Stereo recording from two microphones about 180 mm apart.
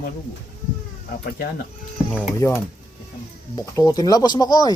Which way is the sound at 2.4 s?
20° left (ahead or behind).